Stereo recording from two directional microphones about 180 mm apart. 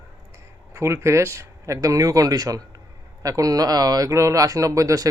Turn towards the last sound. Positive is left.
turn(degrees=-20)  # may be behind; listen again after turning